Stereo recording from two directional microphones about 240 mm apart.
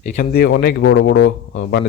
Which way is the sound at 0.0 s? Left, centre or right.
Left.